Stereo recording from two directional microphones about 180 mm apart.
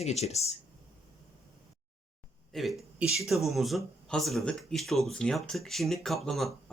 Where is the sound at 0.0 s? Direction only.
35° left (ahead or behind).